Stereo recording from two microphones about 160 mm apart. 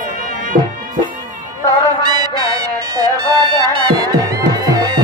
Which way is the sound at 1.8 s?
25° right (ahead or behind).